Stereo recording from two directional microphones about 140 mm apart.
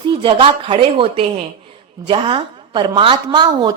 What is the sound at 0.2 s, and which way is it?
A woman's voice, 35° right (ahead or behind).